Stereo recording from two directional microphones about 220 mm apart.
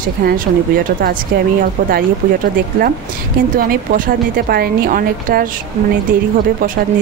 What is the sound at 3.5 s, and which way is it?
A woman's voice, 40° right (ahead or behind).